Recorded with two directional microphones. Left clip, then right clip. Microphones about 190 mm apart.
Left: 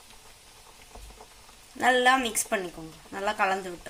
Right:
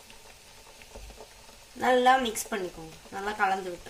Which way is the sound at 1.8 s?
35° left (ahead or behind).